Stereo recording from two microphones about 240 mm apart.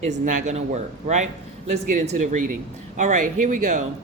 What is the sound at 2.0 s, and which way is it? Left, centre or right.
Speech, right.